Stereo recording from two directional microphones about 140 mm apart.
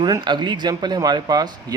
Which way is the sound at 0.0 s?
30° right (ahead or behind).